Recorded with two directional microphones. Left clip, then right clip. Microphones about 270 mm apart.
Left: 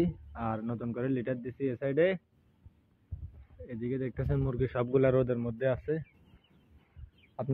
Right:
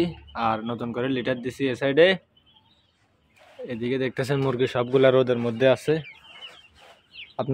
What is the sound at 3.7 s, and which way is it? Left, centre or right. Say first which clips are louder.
Speech: right 9 dB; centre.